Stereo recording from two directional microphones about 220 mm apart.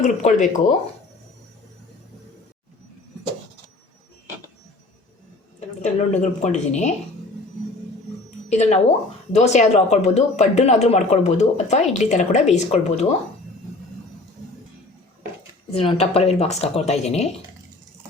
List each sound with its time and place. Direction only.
0.0 s speech: 35° left (ahead or behind)
5.5 s speech: 30° left (ahead or behind)
8.4 s speech: 30° left (ahead or behind)
15.7 s speech: 25° left (ahead or behind)